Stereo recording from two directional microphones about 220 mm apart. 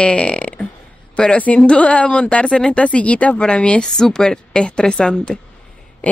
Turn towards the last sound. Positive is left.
turn(degrees=5)  # may be behind; listen again after turning